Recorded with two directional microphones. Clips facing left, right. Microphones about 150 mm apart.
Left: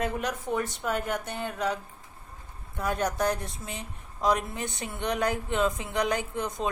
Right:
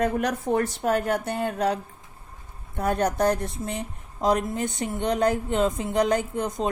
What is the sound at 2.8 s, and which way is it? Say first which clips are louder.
Speech: right 5 dB; 50° right (ahead or behind).